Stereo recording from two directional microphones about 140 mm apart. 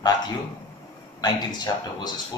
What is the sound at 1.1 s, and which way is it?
Speech, 30° left (ahead or behind).